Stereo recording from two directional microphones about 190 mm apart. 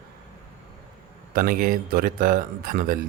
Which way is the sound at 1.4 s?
50° right (ahead or behind).